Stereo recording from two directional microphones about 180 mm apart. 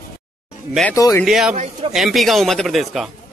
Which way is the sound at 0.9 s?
15° left (ahead or behind).